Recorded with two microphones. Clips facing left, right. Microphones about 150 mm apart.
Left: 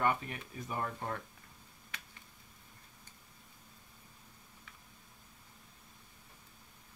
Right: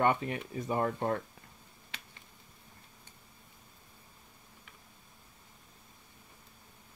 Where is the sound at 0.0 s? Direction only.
25° right (ahead or behind).